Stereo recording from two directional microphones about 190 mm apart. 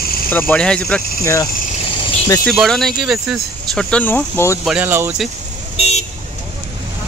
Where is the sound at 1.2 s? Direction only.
15° left (ahead or behind).